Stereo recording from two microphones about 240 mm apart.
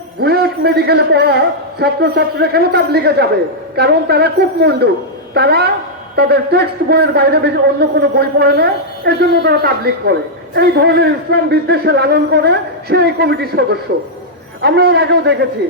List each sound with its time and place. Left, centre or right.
0.2 s a man's voice: right